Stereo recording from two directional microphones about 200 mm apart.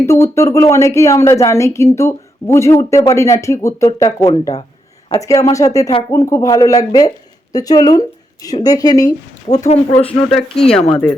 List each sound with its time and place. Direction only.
0.0 s speech: 15° left (ahead or behind)
9.6 s speech: 30° left (ahead or behind)
10.6 s speech: 5° left (ahead or behind)